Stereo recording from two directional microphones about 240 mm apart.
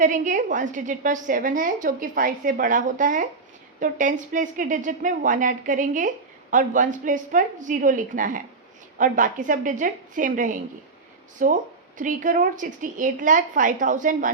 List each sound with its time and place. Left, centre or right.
0.0 s a woman's voice: right